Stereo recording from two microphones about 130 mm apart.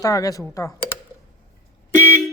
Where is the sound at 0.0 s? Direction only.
25° left (ahead or behind).